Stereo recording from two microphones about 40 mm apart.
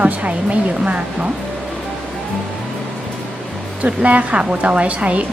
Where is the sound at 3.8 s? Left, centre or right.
Right.